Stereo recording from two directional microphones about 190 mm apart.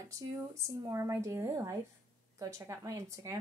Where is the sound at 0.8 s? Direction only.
15° right (ahead or behind).